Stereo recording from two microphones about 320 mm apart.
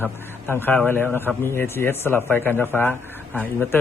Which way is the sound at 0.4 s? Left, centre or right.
Centre.